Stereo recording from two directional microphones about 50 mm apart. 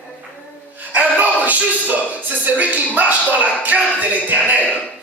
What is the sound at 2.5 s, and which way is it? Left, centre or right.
Speech, right.